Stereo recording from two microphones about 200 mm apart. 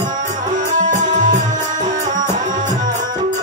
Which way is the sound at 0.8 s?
40° right (ahead or behind).